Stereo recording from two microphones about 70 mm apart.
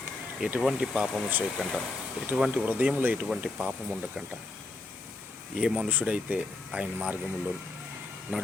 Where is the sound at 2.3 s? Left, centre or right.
Centre.